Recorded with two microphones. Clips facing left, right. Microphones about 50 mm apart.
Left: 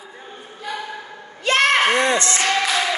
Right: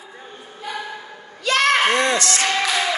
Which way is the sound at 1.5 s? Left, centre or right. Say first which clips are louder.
Left 1 dB; left.